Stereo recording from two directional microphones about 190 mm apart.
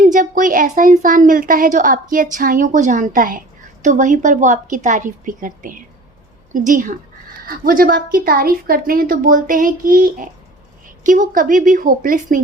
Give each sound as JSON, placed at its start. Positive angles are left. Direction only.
{"t": 0.0, "sound": "a woman's voice", "side_deg": -45}